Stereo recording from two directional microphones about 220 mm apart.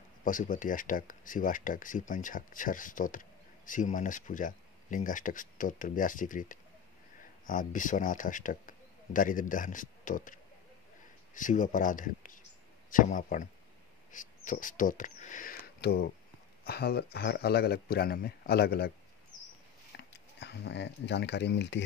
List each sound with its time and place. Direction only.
0.2 s a man's voice: 35° left (ahead or behind)
20.0 s speech: 50° left (ahead or behind)